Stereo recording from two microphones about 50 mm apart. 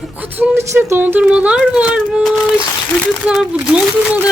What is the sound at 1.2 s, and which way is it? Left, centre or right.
Speech, right.